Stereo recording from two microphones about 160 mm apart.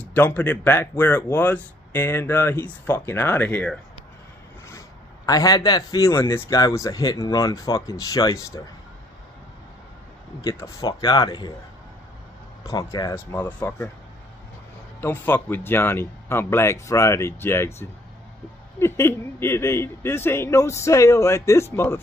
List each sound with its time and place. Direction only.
0.0 s a man's voice: 10° left (ahead or behind)
10.4 s a man's voice: 20° left (ahead or behind)
12.6 s speech: 20° left (ahead or behind)
15.0 s speech: 15° left (ahead or behind)